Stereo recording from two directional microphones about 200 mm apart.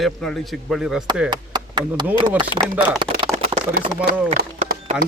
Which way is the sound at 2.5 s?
20° left (ahead or behind).